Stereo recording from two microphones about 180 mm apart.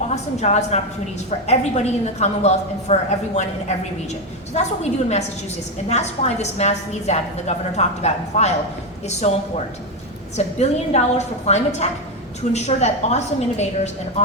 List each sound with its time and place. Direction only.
0.3 s a woman's voice: 40° left (ahead or behind)